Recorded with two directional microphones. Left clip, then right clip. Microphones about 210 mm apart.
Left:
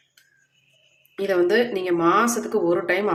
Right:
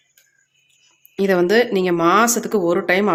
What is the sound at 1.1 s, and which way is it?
Speech, 40° right (ahead or behind).